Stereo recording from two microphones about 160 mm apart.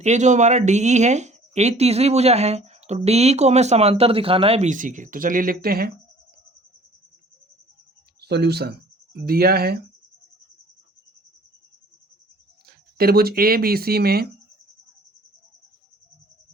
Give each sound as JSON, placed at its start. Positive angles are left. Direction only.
{"t": 0.0, "sound": "speech", "side_deg": -45}
{"t": 8.2, "sound": "speech", "side_deg": -90}
{"t": 9.1, "sound": "speech", "side_deg": -70}
{"t": 12.6, "sound": "speech", "side_deg": -70}